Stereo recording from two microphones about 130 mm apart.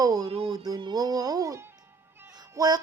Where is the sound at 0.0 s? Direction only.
30° right (ahead or behind).